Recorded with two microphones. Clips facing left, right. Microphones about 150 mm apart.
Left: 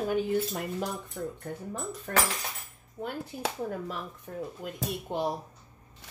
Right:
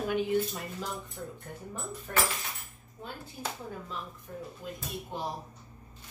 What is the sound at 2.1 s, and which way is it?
Speech, 65° left (ahead or behind).